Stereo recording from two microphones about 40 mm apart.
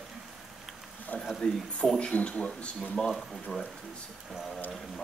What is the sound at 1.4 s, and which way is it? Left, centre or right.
Speech, left.